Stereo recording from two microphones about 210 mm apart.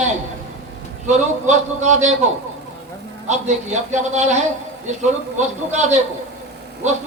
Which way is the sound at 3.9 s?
35° right (ahead or behind).